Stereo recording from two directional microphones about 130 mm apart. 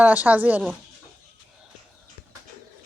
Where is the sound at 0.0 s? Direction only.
10° right (ahead or behind).